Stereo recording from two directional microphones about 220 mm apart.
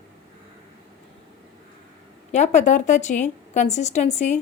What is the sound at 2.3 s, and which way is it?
A woman's voice, 30° left (ahead or behind).